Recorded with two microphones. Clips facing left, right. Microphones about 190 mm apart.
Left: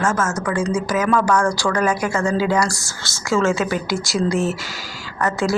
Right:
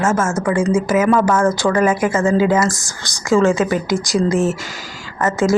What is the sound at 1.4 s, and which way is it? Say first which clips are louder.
Speech: right 4 dB; 20° right (ahead or behind).